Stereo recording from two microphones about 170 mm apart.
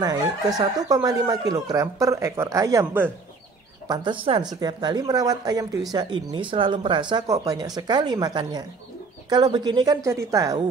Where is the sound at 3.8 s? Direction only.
25° right (ahead or behind).